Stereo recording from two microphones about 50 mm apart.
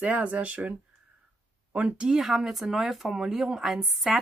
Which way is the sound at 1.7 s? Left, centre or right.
Right.